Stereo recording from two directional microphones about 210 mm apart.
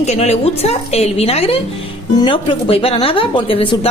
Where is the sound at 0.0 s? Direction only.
30° left (ahead or behind).